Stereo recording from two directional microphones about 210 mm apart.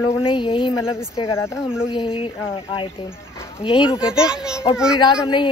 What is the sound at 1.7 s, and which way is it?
Speech, 5° right (ahead or behind).